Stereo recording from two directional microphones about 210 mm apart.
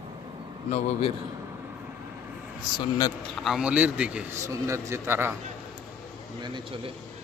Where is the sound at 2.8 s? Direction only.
15° left (ahead or behind).